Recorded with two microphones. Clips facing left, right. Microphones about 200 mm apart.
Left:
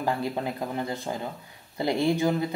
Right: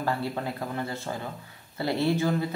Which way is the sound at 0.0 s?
15° left (ahead or behind).